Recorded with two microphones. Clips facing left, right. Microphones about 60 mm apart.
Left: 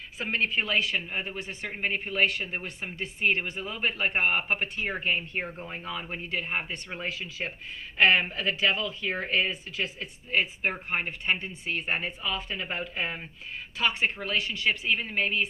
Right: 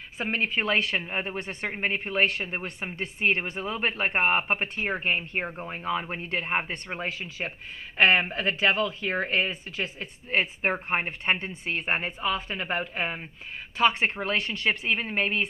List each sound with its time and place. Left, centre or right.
0.2 s speech: right
0.6 s speech: right